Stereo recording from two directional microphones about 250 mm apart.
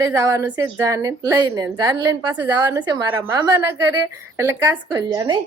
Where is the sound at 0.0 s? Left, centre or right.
Centre.